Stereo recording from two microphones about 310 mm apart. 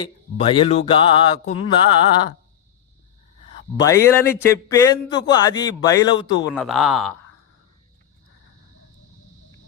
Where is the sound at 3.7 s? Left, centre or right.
Centre.